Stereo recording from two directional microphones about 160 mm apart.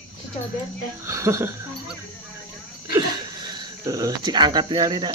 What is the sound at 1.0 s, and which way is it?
Speech, 20° right (ahead or behind).